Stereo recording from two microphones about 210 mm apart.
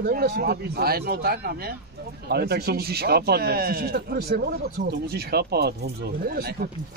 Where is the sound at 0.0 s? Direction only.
45° right (ahead or behind).